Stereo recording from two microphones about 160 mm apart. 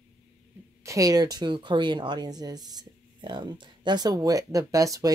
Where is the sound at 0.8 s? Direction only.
20° right (ahead or behind).